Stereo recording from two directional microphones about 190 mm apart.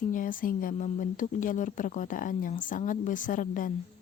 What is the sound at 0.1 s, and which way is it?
Speech, 45° left (ahead or behind).